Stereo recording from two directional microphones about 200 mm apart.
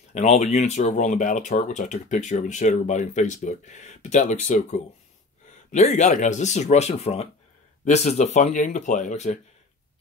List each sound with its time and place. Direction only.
0.1 s speech: 35° left (ahead or behind)